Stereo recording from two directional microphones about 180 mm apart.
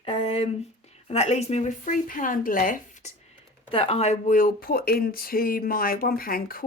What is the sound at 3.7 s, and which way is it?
Speech, 30° left (ahead or behind).